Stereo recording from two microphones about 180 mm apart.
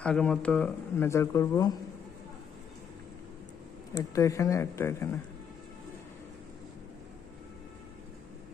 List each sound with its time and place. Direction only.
0.0 s speech: 5° left (ahead or behind)
3.9 s speech: 15° left (ahead or behind)